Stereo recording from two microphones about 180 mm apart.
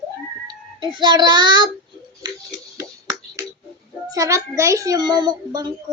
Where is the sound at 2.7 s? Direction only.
15° right (ahead or behind).